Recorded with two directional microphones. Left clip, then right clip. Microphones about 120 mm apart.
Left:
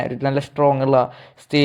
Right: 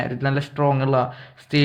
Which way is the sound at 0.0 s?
35° left (ahead or behind).